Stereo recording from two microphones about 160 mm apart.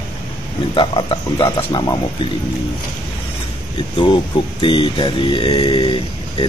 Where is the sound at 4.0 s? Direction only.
30° left (ahead or behind).